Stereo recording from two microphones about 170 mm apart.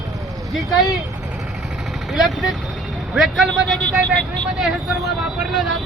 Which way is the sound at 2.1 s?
Centre (ahead or behind).